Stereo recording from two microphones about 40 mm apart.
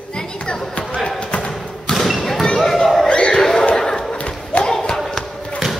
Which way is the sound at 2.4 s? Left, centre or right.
Centre.